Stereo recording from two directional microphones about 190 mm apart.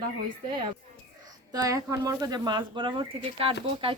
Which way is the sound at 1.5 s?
15° right (ahead or behind).